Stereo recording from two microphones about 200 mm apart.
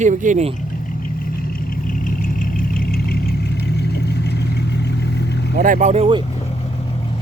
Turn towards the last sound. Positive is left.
turn(degrees=-25)  # may be behind; listen again after turning